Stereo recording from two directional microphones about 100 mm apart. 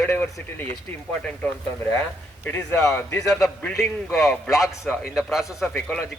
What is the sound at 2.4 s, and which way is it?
Speech, 20° left (ahead or behind).